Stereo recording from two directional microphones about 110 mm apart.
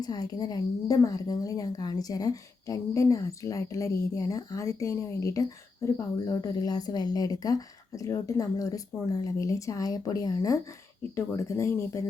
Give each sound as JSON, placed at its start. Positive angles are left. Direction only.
{"t": 0.0, "sound": "a woman's voice", "side_deg": 35}